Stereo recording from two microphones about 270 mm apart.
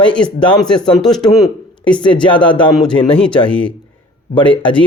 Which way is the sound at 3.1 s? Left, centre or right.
Centre.